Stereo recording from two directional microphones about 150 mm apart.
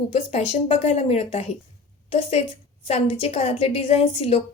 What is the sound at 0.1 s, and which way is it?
A woman's voice, 45° left (ahead or behind).